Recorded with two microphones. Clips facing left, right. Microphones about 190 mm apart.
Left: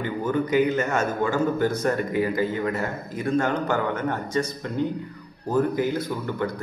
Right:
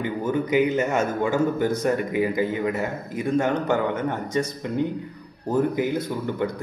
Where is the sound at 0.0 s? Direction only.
15° right (ahead or behind).